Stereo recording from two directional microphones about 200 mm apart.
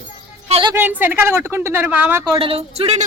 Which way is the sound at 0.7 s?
10° right (ahead or behind).